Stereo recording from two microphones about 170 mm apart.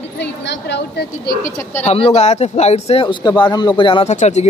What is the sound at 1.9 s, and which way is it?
Speech, 35° left (ahead or behind).